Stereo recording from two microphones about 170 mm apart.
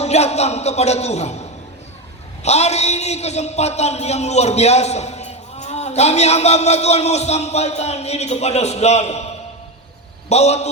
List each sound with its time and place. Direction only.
0.0 s a man's voice: 40° left (ahead or behind)